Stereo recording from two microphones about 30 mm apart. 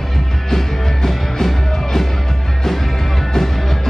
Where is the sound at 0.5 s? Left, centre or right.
Centre.